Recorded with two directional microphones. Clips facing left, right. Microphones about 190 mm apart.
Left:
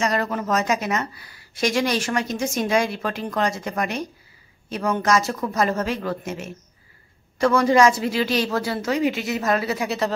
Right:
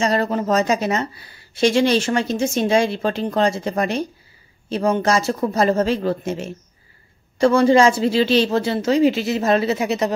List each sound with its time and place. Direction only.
0.0 s speech: 30° right (ahead or behind)